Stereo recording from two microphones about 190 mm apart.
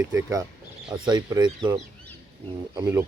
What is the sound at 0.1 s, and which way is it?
Speech, 15° right (ahead or behind).